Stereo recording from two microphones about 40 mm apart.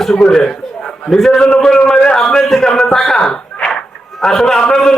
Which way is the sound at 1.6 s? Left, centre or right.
Centre.